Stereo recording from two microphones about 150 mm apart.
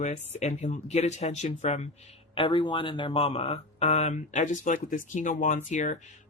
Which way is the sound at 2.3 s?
35° left (ahead or behind).